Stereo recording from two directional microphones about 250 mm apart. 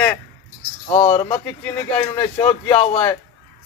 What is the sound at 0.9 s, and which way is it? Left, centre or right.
Speech, left.